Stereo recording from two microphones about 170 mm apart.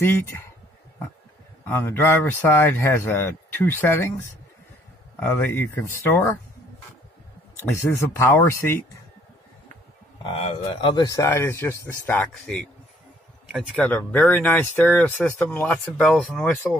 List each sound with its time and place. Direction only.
0.0 s speech: 15° left (ahead or behind)
1.6 s speech: 10° left (ahead or behind)
7.5 s speech: 15° left (ahead or behind)
10.2 s speech: 35° left (ahead or behind); by 16.5 s 5° left (ahead or behind)